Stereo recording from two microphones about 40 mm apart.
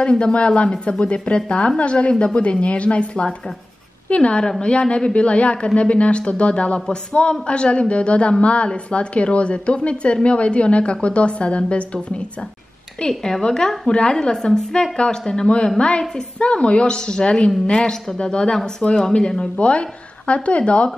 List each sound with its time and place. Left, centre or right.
0.2 s a woman's voice: left
13.2 s a woman's voice: centre